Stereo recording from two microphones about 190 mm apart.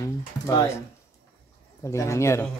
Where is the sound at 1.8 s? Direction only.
15° left (ahead or behind).